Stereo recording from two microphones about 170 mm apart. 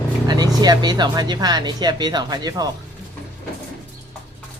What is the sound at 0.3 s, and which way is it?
Speech, 25° right (ahead or behind).